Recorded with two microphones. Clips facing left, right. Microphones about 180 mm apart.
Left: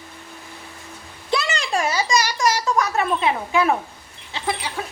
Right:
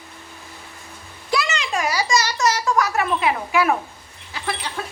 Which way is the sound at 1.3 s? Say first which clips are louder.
Left 1 dB; 35° left (ahead or behind).